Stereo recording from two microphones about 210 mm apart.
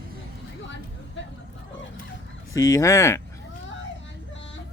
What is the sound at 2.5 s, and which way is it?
Speech, 15° left (ahead or behind).